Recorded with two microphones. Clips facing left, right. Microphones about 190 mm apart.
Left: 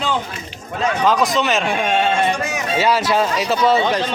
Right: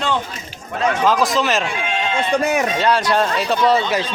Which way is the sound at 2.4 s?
60° right (ahead or behind).